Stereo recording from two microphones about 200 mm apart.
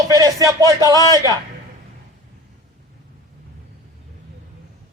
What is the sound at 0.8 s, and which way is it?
Speech, 15° left (ahead or behind).